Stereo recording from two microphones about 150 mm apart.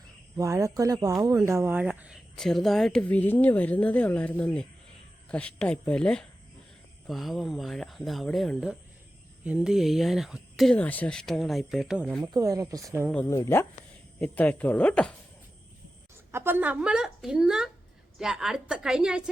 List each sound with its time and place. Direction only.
0.3 s speech: 20° right (ahead or behind); by 12.0 s centre (ahead or behind)
12.2 s speech: 25° right (ahead or behind)
13.2 s speech: 20° left (ahead or behind)
16.3 s speech: 15° right (ahead or behind)